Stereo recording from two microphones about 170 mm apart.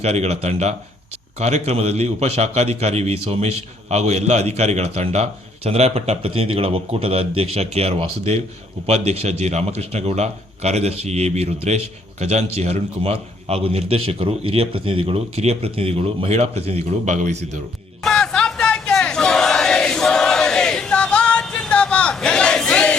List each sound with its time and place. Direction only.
0.0 s a man's voice: 40° right (ahead or behind)
18.0 s crowd: 5° left (ahead or behind)